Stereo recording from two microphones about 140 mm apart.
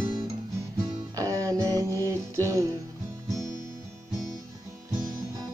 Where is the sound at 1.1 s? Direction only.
25° right (ahead or behind).